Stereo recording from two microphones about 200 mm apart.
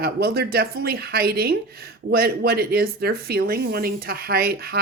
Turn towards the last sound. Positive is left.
turn(degrees=-50)  # may be behind; listen again after turning